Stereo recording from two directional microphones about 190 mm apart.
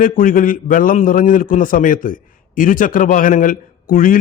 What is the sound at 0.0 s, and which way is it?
A man's voice, 45° left (ahead or behind).